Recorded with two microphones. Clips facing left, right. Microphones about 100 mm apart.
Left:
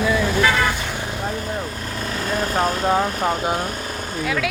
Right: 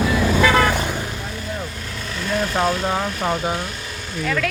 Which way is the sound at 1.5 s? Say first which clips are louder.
Left 3 dB; 40° left (ahead or behind).